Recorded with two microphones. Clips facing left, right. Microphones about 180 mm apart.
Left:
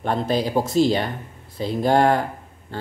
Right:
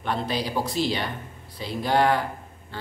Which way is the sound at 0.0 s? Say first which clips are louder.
Left 5 dB; 45° left (ahead or behind).